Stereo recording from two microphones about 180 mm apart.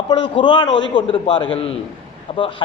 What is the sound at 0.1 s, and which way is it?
A man's voice, 25° left (ahead or behind).